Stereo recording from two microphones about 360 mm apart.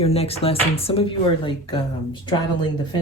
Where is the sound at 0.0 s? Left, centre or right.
Centre.